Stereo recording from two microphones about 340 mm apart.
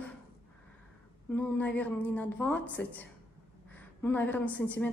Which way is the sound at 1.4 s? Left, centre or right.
Centre.